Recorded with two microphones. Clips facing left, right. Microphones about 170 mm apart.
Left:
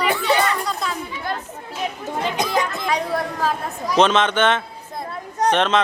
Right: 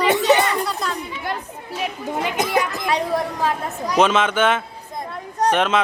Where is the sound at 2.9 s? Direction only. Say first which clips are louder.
Right 2 dB; 20° right (ahead or behind).